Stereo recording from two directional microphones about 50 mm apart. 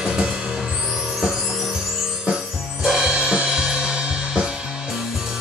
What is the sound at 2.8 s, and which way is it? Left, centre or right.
Music, centre.